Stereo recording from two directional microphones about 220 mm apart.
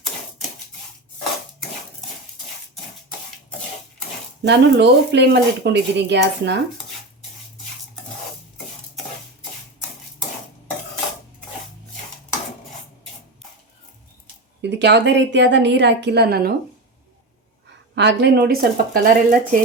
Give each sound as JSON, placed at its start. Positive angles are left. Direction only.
{"t": 4.4, "sound": "speech", "side_deg": -50}
{"t": 14.6, "sound": "speech", "side_deg": -50}
{"t": 17.9, "sound": "speech", "side_deg": -50}